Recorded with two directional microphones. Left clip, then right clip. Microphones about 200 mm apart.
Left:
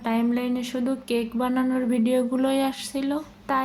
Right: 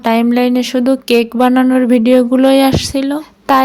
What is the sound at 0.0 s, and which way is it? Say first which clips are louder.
Speech: right 14 dB; 50° right (ahead or behind).